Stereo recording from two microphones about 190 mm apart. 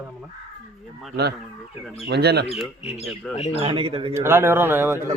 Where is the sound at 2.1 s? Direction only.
60° right (ahead or behind).